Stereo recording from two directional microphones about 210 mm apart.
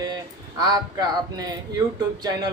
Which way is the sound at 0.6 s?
20° right (ahead or behind).